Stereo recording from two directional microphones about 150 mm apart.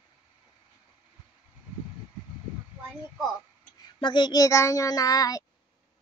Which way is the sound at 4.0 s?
30° left (ahead or behind).